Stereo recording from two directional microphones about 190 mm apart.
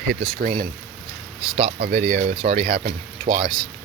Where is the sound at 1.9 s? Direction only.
35° right (ahead or behind).